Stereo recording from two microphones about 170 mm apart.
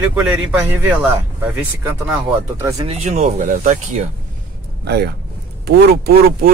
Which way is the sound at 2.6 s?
20° right (ahead or behind).